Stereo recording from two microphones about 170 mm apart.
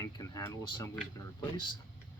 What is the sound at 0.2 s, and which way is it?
Speech, 25° left (ahead or behind).